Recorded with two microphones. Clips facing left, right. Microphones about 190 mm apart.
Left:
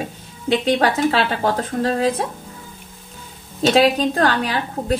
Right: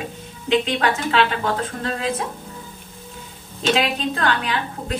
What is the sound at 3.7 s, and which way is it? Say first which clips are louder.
A woman's voice: left 5 dB; 40° left (ahead or behind).